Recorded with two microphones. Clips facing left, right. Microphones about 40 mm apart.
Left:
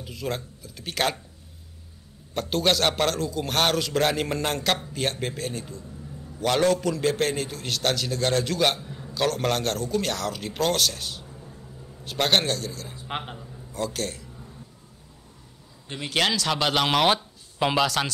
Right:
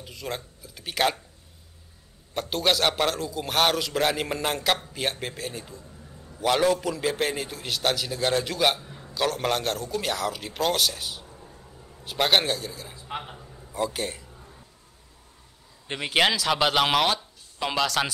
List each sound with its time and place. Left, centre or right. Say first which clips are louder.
0.0 s a man's voice: left 3 dB; centre
2.3 s a man's voice: left 1 dB; centre
16.0 s a man's voice: right 2 dB; centre
17.1 s a sound: left 4 dB; left
17.7 s a man's voice: even; centre